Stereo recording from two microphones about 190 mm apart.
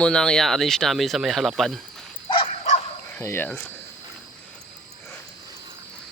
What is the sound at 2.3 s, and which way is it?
Dog, 35° left (ahead or behind).